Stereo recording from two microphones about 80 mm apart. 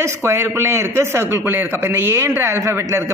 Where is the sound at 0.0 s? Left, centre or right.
Right.